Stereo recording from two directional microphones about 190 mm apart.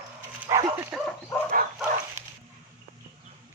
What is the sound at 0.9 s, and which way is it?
Dog, 5° right (ahead or behind).